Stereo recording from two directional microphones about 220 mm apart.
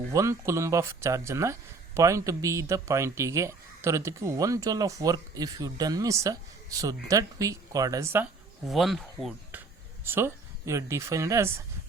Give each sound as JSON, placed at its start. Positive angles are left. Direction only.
{"t": 0.1, "sound": "speech", "side_deg": -15}